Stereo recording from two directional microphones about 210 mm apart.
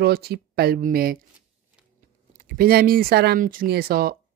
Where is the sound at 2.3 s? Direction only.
40° right (ahead or behind).